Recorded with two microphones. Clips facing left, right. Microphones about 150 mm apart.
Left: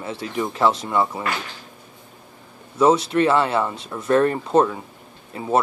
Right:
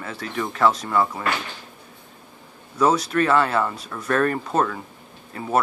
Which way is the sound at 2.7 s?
25° left (ahead or behind).